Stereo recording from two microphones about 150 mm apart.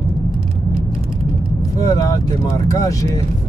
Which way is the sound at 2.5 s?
20° left (ahead or behind).